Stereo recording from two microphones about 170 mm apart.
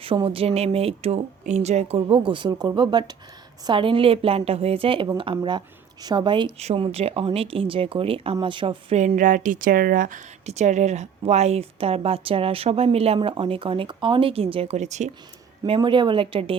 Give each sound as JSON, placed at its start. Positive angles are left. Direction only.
{"t": 0.0, "sound": "speech", "side_deg": -30}
{"t": 9.0, "sound": "speech", "side_deg": -50}
{"t": 15.6, "sound": "speech", "side_deg": -30}